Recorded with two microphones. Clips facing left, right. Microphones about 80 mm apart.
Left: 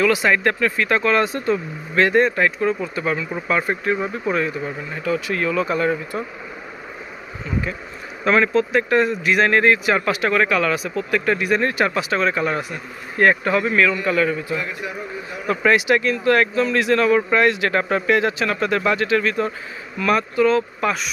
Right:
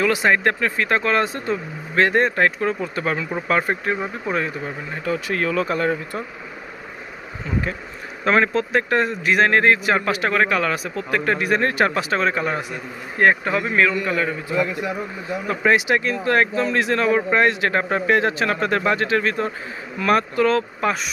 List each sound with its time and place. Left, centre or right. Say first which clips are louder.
0.0 s speech: left 1 dB; right
8.2 s speech: left 1 dB; right
15.5 s speech: left 2 dB; right
20.0 s speech: even; right
20.8 s speech: even; right